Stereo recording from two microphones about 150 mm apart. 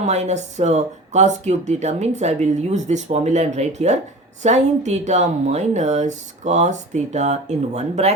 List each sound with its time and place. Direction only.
0.0 s speech: 50° right (ahead or behind)